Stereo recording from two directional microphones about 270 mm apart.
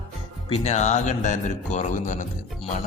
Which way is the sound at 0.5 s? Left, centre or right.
Left.